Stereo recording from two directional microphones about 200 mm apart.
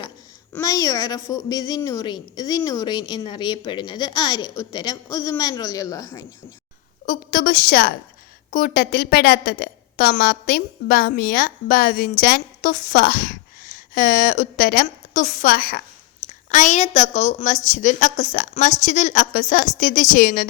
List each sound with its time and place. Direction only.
0.5 s a woman's voice: 15° left (ahead or behind)
7.0 s a woman's voice: 40° left (ahead or behind)